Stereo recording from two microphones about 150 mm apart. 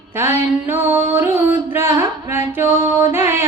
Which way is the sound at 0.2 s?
15° right (ahead or behind).